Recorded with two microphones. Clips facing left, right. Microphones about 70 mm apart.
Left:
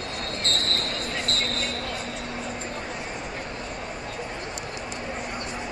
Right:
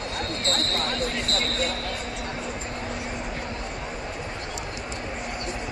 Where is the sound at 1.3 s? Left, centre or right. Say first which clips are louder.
Right 2 dB; left.